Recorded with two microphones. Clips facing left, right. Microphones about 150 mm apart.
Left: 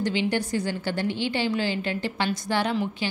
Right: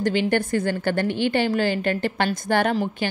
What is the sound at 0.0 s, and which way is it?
A woman's voice, 50° right (ahead or behind).